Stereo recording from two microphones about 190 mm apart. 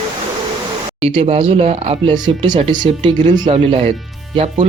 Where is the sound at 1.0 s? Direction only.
30° right (ahead or behind).